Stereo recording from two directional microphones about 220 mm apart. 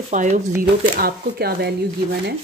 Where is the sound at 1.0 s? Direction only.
45° right (ahead or behind).